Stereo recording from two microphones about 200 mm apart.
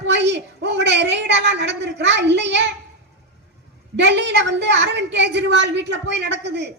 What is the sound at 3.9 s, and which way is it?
A woman's voice, 60° right (ahead or behind).